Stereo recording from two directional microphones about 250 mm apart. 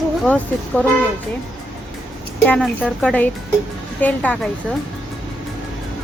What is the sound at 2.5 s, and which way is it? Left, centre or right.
A woman's voice, centre.